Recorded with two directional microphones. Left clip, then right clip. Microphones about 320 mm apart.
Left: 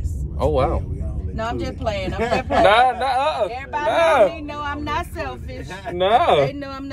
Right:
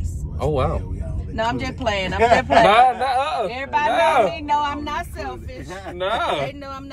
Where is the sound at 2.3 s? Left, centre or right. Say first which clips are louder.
Right 3 dB; right.